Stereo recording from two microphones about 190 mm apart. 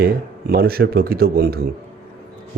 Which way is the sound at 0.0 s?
55° right (ahead or behind).